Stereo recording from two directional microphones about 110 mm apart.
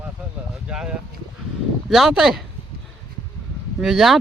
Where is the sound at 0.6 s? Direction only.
10° right (ahead or behind).